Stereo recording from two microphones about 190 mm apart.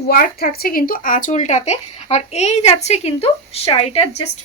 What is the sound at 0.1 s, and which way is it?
Speech, 50° left (ahead or behind).